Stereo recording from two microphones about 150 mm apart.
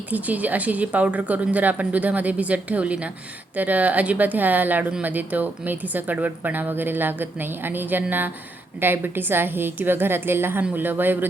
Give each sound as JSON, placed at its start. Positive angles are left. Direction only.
{"t": 0.1, "sound": "speech", "side_deg": -10}